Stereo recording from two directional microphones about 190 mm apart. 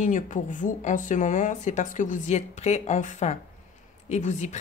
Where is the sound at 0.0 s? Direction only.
40° left (ahead or behind).